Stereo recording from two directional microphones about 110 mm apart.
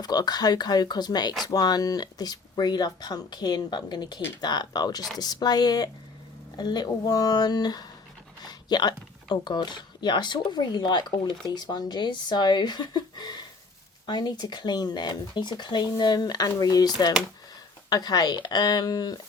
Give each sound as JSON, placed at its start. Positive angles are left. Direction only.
{"t": 0.0, "sound": "speech", "side_deg": 35}